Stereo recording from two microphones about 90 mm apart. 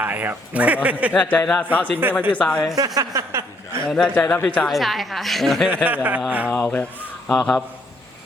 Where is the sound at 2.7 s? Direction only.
45° right (ahead or behind).